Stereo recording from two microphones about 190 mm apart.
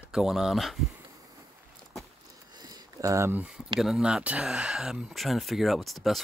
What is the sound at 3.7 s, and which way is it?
Speech, 5° right (ahead or behind).